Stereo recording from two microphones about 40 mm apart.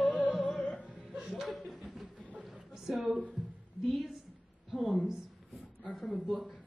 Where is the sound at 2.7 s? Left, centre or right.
Centre.